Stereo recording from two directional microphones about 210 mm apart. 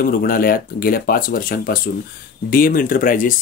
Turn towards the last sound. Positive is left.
turn(degrees=40)  # may be behind; listen again after turning